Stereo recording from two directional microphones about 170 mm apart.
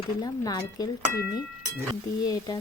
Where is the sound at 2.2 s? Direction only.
20° left (ahead or behind).